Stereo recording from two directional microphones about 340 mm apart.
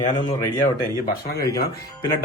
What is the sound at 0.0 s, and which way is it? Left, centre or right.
Speech, centre.